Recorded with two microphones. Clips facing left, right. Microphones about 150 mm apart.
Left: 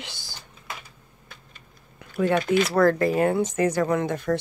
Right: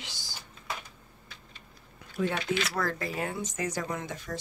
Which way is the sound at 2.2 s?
55° left (ahead or behind).